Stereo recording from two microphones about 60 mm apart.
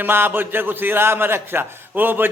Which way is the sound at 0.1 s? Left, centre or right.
Right.